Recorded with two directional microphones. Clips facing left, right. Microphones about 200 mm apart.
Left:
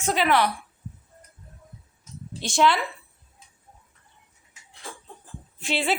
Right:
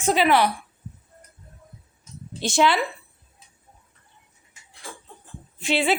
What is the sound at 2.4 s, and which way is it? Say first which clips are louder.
Speech: right 1 dB; 5° right (ahead or behind).